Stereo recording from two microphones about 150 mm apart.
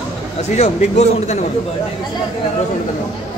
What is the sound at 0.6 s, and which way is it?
Speech, 45° left (ahead or behind).